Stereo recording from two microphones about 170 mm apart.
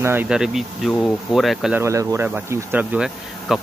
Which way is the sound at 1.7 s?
15° right (ahead or behind).